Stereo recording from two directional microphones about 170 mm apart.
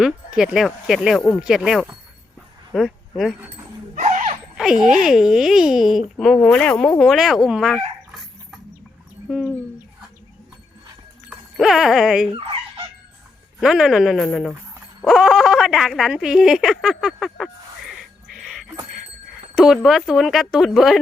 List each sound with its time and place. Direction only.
0.0 s speech: 5° right (ahead or behind)
3.9 s a sound: 45° right (ahead or behind)
4.5 s speech: 5° right (ahead or behind)
11.3 s speech: centre (ahead or behind)
13.6 s speech: 5° right (ahead or behind)
15.0 s a sound: centre (ahead or behind)
19.5 s speech: centre (ahead or behind)